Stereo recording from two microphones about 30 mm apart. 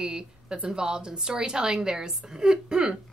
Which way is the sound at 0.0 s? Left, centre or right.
Right.